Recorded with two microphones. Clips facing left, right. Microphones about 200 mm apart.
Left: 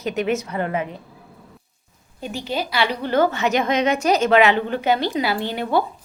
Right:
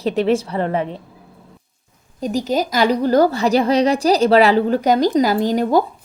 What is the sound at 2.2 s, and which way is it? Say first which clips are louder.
A woman's voice: right 7 dB; 40° right (ahead or behind).